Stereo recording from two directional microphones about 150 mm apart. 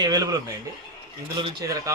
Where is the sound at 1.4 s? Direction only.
25° right (ahead or behind).